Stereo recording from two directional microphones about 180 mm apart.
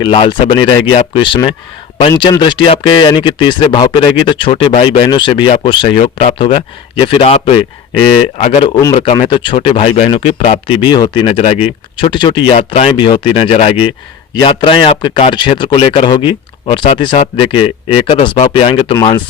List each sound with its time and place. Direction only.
0.0 s speech: 30° left (ahead or behind)